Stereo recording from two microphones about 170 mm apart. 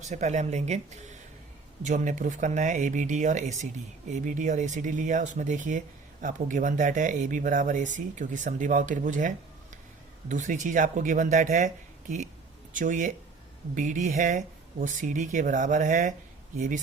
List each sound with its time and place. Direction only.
0.0 s speech: 45° right (ahead or behind)
1.8 s speech: 45° right (ahead or behind)